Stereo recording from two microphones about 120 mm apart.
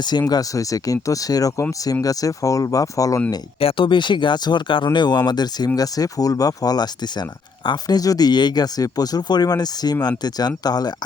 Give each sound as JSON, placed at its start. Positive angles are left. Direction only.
{"t": 0.0, "sound": "speech", "side_deg": 35}
{"t": 3.6, "sound": "speech", "side_deg": 50}